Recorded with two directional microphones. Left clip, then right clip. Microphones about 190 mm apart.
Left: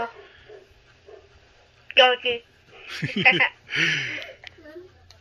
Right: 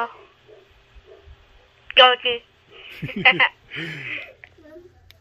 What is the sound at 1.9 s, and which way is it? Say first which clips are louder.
Speech: right 4 dB; 50° right (ahead or behind).